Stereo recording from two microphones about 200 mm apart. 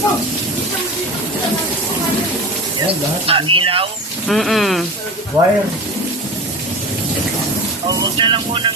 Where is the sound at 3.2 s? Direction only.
25° right (ahead or behind).